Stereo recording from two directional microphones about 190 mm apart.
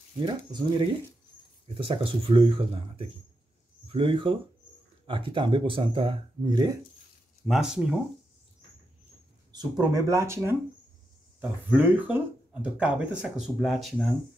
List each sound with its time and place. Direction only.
0.2 s speech: 25° right (ahead or behind)
7.4 s speech: centre (ahead or behind)
9.5 s speech: 20° right (ahead or behind)
11.7 s speech: 10° right (ahead or behind)